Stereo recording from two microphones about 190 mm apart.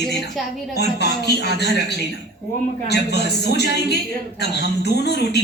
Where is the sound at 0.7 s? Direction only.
60° left (ahead or behind).